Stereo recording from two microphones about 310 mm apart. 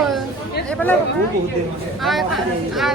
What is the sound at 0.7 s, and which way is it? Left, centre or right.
Speech, centre.